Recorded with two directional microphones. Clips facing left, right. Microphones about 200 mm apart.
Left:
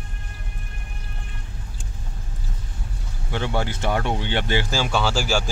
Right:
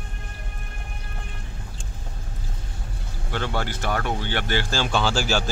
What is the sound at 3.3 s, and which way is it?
Speech, 15° left (ahead or behind).